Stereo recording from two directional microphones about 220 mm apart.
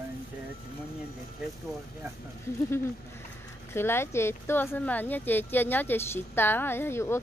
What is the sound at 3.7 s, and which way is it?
Speech, 10° left (ahead or behind).